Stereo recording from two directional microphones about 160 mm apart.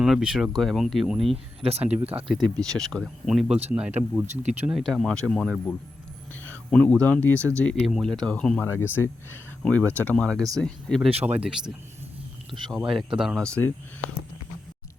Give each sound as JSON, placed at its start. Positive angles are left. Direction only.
{"t": 0.0, "sound": "speech", "side_deg": -5}
{"t": 1.6, "sound": "speech", "side_deg": -40}
{"t": 2.2, "sound": "speech", "side_deg": 0}
{"t": 7.8, "sound": "speech", "side_deg": -5}
{"t": 12.9, "sound": "speech", "side_deg": -5}